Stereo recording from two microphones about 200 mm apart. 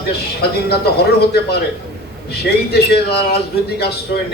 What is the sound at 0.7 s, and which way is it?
A man's voice, 55° left (ahead or behind).